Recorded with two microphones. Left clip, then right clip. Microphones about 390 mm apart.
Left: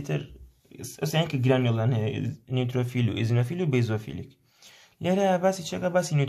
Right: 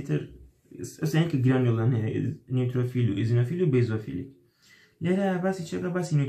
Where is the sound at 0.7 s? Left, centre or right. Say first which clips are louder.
Left 1 dB; centre.